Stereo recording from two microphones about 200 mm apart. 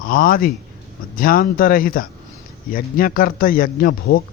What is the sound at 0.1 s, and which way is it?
A man's voice, 45° left (ahead or behind).